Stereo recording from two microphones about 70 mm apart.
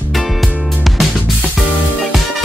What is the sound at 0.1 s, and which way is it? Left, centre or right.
Music, centre.